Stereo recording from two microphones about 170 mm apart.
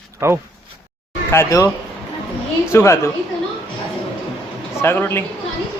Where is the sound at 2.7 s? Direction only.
15° left (ahead or behind).